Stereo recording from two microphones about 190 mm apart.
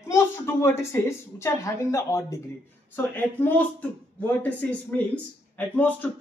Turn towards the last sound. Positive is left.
turn(degrees=10)  # may be behind; listen again after turning